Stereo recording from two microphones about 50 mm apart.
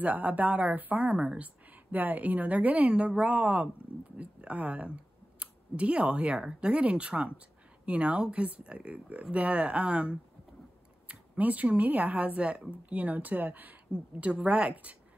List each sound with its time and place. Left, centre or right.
0.0 s speech: right
1.7 s speech: right
13.9 s speech: right